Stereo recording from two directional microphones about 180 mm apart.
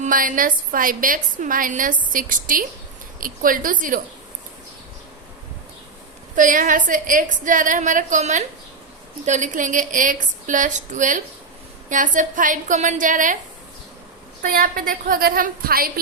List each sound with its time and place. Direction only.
0.0 s a woman's voice: 50° right (ahead or behind)
6.3 s a woman's voice: 45° right (ahead or behind)
14.4 s a woman's voice: 50° right (ahead or behind)